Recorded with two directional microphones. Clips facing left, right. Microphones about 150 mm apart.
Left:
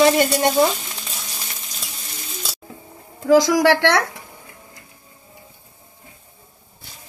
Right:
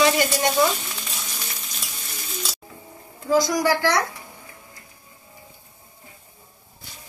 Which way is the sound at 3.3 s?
85° left.